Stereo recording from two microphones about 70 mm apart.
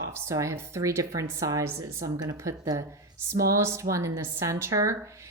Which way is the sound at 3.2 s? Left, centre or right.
Right.